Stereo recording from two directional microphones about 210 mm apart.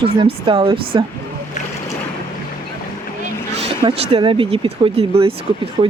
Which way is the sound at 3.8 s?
25° right (ahead or behind).